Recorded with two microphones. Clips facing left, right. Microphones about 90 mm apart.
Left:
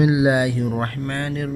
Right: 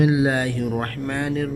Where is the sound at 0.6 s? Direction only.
Centre (ahead or behind).